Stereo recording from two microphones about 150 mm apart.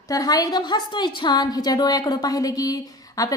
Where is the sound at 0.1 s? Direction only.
25° left (ahead or behind).